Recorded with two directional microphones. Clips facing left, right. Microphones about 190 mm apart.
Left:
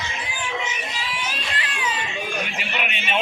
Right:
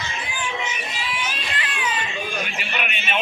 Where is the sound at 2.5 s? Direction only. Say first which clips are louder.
Even; 25° left (ahead or behind).